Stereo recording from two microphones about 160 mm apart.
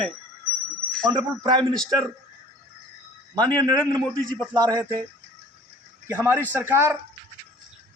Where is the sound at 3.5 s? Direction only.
25° right (ahead or behind).